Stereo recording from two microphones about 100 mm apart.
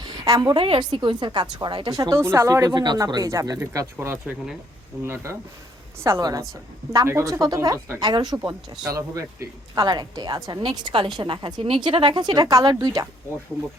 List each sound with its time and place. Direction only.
0.0 s a sound: 40° right (ahead or behind)
0.5 s a woman's voice: 55° right (ahead or behind)
2.0 s speech: 30° right (ahead or behind)
2.7 s speech: 45° right (ahead or behind)
8.9 s a woman's voice: 35° right (ahead or behind)